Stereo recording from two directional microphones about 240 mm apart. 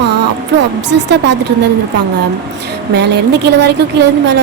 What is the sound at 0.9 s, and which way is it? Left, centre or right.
Speech, right.